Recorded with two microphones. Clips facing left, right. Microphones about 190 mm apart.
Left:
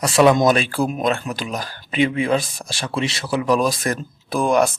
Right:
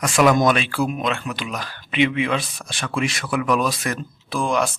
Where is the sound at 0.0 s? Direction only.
30° left (ahead or behind).